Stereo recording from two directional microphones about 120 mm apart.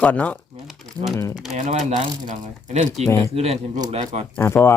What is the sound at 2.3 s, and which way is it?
Speech, 80° right.